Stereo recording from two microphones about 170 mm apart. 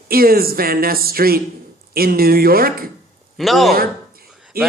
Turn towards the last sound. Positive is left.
turn(degrees=-60)  # may be behind; listen again after turning